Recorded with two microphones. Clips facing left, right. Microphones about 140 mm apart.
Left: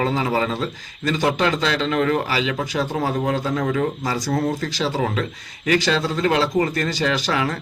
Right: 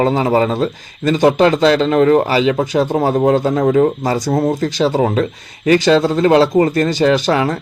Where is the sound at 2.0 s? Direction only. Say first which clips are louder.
Right 9 dB; 30° right (ahead or behind).